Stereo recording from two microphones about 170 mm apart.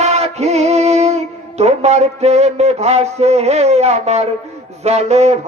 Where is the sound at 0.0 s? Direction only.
40° right (ahead or behind).